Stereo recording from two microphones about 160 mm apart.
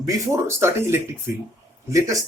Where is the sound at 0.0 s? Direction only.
20° right (ahead or behind).